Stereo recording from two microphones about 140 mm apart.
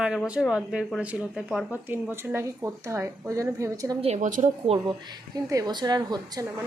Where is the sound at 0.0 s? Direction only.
5° right (ahead or behind); by 3.9 s 20° right (ahead or behind).